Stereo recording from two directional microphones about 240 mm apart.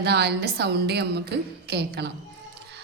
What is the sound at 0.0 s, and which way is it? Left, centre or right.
Mantra, right.